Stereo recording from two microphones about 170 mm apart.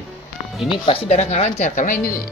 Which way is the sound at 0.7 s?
30° left (ahead or behind).